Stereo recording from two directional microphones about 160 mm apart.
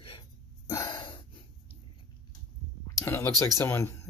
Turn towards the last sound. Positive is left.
turn(degrees=20)  # may be behind; listen again after turning